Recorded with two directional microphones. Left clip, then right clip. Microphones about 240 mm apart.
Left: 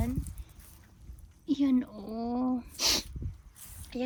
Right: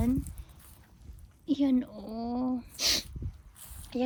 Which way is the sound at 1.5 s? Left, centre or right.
Centre.